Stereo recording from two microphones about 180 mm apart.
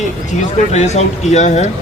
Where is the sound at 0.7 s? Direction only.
40° left (ahead or behind).